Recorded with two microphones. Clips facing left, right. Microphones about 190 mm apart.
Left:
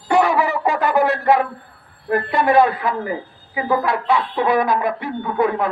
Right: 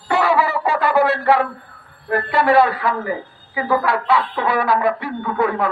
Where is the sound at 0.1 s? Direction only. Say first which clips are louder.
Left 1 dB; 15° left (ahead or behind).